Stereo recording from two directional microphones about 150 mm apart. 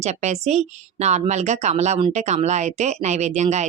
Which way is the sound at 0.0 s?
50° right (ahead or behind).